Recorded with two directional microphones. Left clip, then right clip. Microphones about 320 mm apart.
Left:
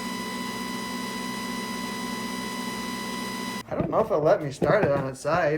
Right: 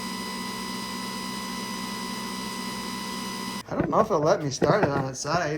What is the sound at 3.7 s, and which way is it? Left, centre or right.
Speech, centre.